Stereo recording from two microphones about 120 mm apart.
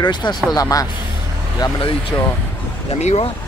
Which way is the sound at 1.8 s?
45° left (ahead or behind).